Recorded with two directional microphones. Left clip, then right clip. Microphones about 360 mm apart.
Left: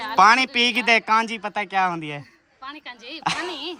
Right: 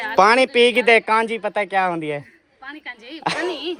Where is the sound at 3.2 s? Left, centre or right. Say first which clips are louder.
Right 3 dB; centre.